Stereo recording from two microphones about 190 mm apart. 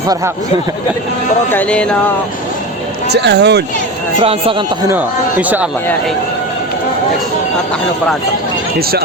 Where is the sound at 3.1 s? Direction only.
65° right (ahead or behind).